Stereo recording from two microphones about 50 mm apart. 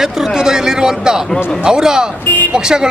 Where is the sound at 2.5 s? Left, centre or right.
Centre.